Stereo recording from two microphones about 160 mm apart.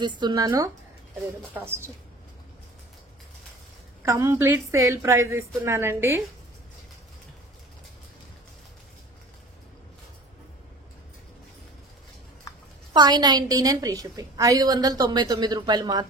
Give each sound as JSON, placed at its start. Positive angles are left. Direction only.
{"t": 0.0, "sound": "a woman's voice", "side_deg": -30}
{"t": 4.0, "sound": "a woman's voice", "side_deg": -20}
{"t": 12.9, "sound": "a woman's voice", "side_deg": -25}